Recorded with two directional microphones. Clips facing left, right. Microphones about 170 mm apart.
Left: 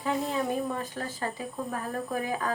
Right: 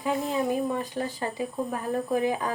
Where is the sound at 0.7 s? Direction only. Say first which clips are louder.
Right 4 dB; 15° right (ahead or behind).